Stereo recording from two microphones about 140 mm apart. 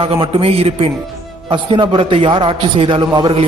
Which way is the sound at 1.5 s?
35° right (ahead or behind).